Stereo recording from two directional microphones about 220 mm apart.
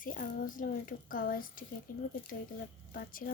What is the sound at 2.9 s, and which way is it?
Speech, 40° left (ahead or behind).